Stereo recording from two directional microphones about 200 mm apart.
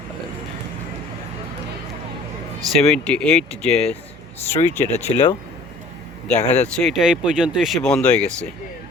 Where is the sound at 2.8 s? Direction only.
5° left (ahead or behind).